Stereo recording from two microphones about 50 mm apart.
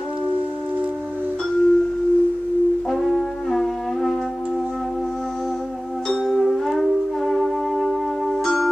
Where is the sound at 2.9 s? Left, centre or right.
Centre.